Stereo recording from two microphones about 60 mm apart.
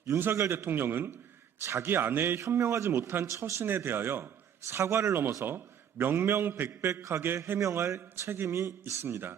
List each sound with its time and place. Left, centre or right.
0.3 s a man's voice: right
3.2 s speech: right
3.6 s a man's voice: right
7.6 s a man's voice: right
9.0 s a man's voice: right